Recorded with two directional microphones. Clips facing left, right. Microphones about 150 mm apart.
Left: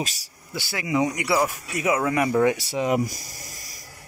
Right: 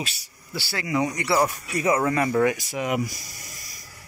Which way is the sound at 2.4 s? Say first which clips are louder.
Left 2 dB; 30° left (ahead or behind).